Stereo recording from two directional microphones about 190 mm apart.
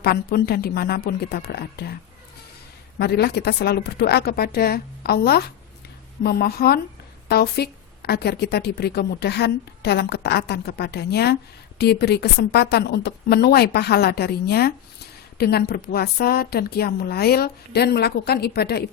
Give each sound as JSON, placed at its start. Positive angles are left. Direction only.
{"t": 0.0, "sound": "a woman's voice", "side_deg": 50}
{"t": 3.0, "sound": "a woman's voice", "side_deg": 60}